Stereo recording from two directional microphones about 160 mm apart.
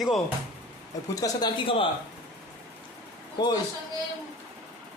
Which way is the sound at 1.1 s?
25° left (ahead or behind).